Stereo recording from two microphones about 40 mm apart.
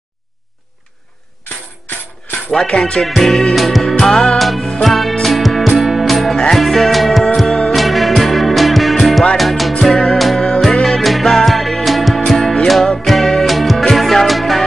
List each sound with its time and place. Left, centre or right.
2.6 s music: left
3.1 s music: centre
3.8 s music: centre
4.4 s music: centre
7.4 s music: centre
7.7 s music: centre
10.6 s music: centre